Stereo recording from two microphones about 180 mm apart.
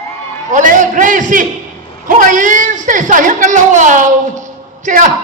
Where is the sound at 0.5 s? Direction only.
45° right (ahead or behind).